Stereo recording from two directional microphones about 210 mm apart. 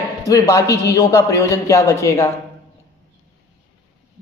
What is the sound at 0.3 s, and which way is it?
Speech, 15° left (ahead or behind).